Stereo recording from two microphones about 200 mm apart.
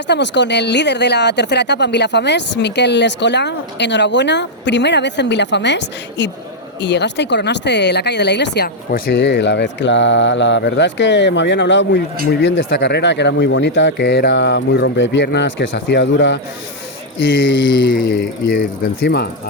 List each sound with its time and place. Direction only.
0.1 s speech: 60° left (ahead or behind)
18.2 s speech: 45° left (ahead or behind)